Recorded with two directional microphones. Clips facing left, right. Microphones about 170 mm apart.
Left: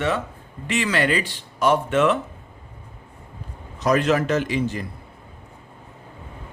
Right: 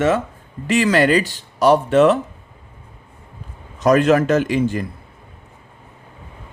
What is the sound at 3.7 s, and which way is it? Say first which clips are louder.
Speech: right 6 dB; 50° right (ahead or behind).